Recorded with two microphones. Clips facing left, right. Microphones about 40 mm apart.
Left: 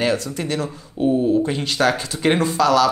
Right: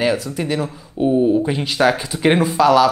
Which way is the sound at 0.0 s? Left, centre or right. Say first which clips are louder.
Right 2 dB; centre.